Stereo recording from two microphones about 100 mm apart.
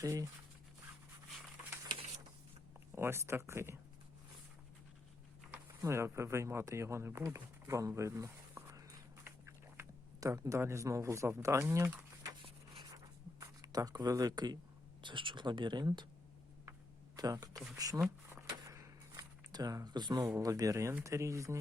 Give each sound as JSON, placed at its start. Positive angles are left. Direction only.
{"t": 0.0, "sound": "speech", "side_deg": -35}
{"t": 2.9, "sound": "speech", "side_deg": -25}
{"t": 5.8, "sound": "speech", "side_deg": -30}
{"t": 9.2, "sound": "a sound", "side_deg": -25}
{"t": 13.4, "sound": "speech", "side_deg": -40}
{"t": 15.0, "sound": "speech", "side_deg": -55}
{"t": 17.2, "sound": "speech", "side_deg": -40}
{"t": 17.5, "sound": "speech", "side_deg": -5}
{"t": 17.7, "sound": "speech", "side_deg": -35}
{"t": 18.3, "sound": "a sound", "side_deg": -30}
{"t": 20.2, "sound": "speech", "side_deg": -35}